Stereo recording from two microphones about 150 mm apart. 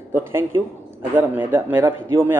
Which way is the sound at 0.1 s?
15° right (ahead or behind).